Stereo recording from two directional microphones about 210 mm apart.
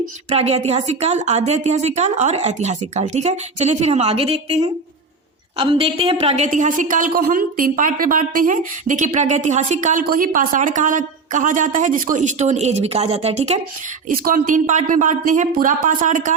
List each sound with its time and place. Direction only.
0.3 s a woman's voice: 30° right (ahead or behind)
14.1 s a woman's voice: 45° right (ahead or behind)